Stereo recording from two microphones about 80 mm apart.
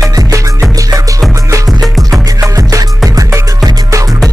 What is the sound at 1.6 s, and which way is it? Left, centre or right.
Music, centre.